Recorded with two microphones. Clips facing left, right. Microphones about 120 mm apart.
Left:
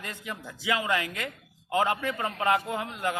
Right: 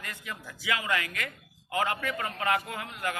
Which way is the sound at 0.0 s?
25° left (ahead or behind).